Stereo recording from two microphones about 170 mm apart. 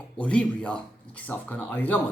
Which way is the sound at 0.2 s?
5° left (ahead or behind).